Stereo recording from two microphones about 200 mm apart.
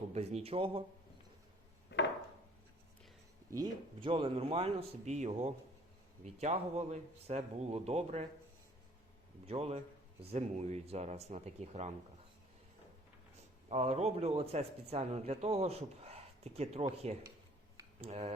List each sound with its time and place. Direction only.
0.1 s speech: 30° right (ahead or behind)
1.9 s a sound: 60° left (ahead or behind)
3.5 s speech: 20° right (ahead or behind)
9.5 s speech: 30° right (ahead or behind)
13.7 s speech: 30° right (ahead or behind)